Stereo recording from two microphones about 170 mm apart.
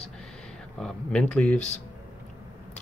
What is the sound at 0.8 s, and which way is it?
Speech, 5° left (ahead or behind).